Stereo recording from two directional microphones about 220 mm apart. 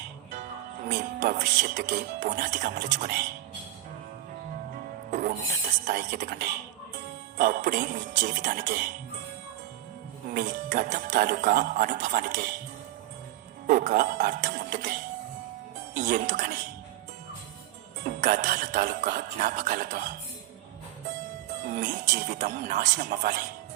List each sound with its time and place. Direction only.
0.3 s speech: 35° right (ahead or behind)
5.1 s speech: 40° right (ahead or behind)
7.9 s speech: 50° right (ahead or behind)
8.4 s speech: 35° right (ahead or behind)
10.3 s speech: 40° right (ahead or behind)
13.7 s speech: 40° right (ahead or behind)
16.0 s speech: 40° right (ahead or behind)
18.0 s speech: 40° right (ahead or behind)
21.7 s speech: 35° right (ahead or behind)